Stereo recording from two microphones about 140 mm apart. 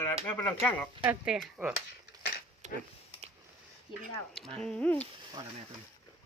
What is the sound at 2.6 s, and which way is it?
Speech, 55° right (ahead or behind).